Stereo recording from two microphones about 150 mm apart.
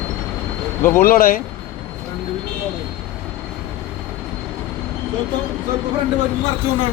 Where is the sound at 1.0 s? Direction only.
80° left.